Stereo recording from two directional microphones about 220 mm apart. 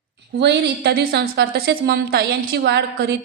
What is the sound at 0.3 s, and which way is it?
A woman's voice, 50° right (ahead or behind).